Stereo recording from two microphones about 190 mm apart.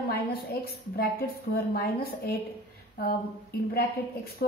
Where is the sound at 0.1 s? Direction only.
55° left (ahead or behind).